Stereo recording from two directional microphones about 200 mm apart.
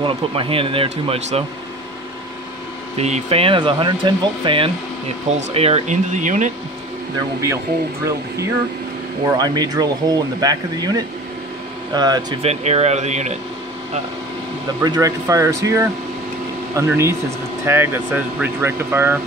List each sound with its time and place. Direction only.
0.0 s speech: 25° right (ahead or behind)
3.0 s speech: 35° right (ahead or behind)
7.4 s speech: 15° right (ahead or behind)
12.4 s speech: 30° right (ahead or behind)
14.8 s speech: 15° right (ahead or behind)